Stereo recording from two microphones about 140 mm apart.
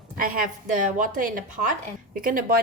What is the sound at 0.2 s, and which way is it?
Speech, 75° right (ahead or behind).